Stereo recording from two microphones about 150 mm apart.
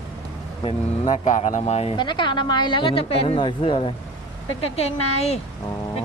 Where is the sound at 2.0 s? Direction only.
30° left (ahead or behind).